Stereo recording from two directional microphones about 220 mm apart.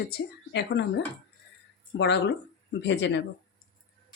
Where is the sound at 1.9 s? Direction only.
55° left (ahead or behind).